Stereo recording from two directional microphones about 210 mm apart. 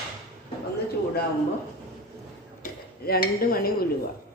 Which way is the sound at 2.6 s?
45° left (ahead or behind).